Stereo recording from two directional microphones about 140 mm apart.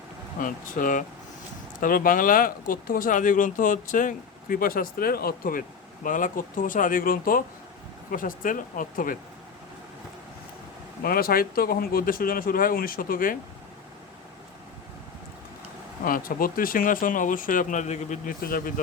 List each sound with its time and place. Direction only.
0.3 s speech: 80° left
8.1 s speech: 75° left (ahead or behind)
11.0 s speech: 90° left
16.0 s speech: 90° left